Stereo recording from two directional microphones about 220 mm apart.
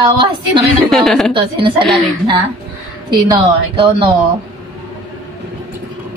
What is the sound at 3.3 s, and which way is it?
Speech, 25° right (ahead or behind).